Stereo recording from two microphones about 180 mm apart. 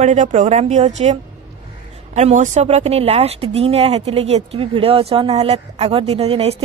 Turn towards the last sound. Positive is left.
turn(degrees=-35)  # may be behind; listen again after turning